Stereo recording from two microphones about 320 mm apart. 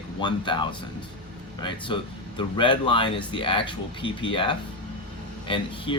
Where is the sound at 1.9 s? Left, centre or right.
Centre.